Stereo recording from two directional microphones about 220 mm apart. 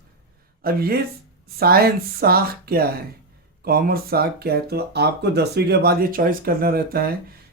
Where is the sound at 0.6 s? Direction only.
45° right (ahead or behind).